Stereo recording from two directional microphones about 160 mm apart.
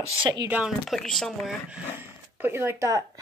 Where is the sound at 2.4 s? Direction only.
15° right (ahead or behind).